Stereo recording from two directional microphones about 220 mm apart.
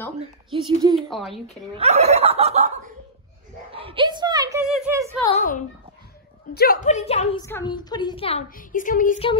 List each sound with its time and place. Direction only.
0.2 s speech: 20° right (ahead or behind)
0.9 s a woman's voice: centre (ahead or behind)
1.8 s speech: 30° right (ahead or behind)
3.7 s a sound: 25° right (ahead or behind)
4.6 s a sound: 5° right (ahead or behind)
5.2 s a woman's voice: 30° left (ahead or behind)
6.5 s a woman's voice: 40° left (ahead or behind)
7.4 s a woman's voice: 15° left (ahead or behind)
8.5 s a woman's voice: 35° left (ahead or behind)